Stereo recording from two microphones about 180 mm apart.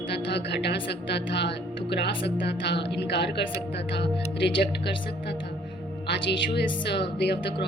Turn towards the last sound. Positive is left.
turn(degrees=70)  # may be behind; listen again after turning